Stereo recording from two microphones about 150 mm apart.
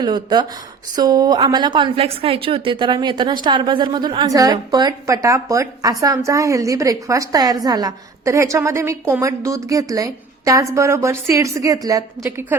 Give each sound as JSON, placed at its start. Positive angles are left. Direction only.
{"t": 0.0, "sound": "a woman's voice", "side_deg": -30}